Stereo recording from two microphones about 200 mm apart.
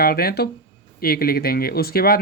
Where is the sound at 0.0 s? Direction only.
50° left (ahead or behind).